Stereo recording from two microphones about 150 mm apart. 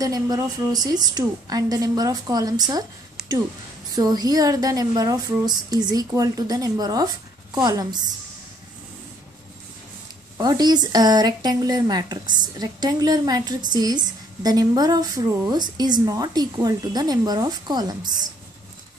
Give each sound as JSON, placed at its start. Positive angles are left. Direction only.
{"t": 0.0, "sound": "speech", "side_deg": -25}
{"t": 3.9, "sound": "speech", "side_deg": -25}
{"t": 10.3, "sound": "speech", "side_deg": -25}